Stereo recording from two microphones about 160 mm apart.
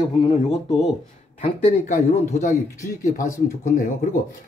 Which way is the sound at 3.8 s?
55° left (ahead or behind).